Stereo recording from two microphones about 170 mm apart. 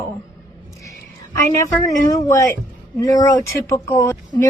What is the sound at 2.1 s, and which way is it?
Speech, 20° left (ahead or behind).